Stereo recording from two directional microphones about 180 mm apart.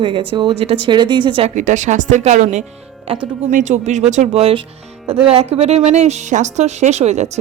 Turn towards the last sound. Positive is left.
turn(degrees=-40)  # may be behind; listen again after turning